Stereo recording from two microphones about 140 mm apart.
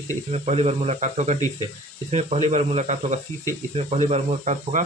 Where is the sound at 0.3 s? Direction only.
50° right (ahead or behind).